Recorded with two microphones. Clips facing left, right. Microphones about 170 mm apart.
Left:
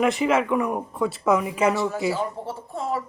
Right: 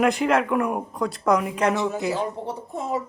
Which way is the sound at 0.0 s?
Centre (ahead or behind).